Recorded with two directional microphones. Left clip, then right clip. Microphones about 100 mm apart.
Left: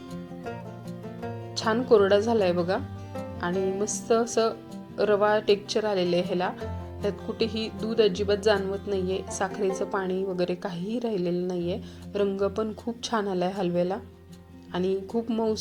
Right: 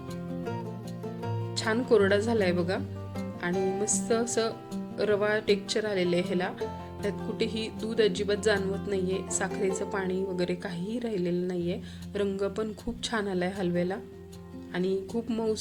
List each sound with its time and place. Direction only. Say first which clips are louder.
1.2 s speech: left 3 dB; 5° left (ahead or behind); by 12.2 s 20° left (ahead or behind)
12.2 s speech: left 4 dB; 10° left (ahead or behind)
15.1 s speech: left 4 dB; centre (ahead or behind)